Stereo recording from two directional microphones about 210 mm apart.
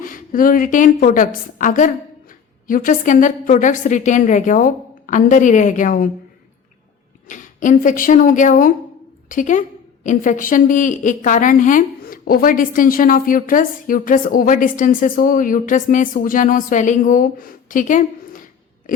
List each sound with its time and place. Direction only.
0.0 s a woman's voice: 40° left (ahead or behind)
7.3 s a woman's voice: 35° left (ahead or behind)